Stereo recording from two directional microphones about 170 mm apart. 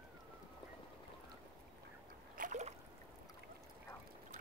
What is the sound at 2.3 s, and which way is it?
Boat, 50° right (ahead or behind).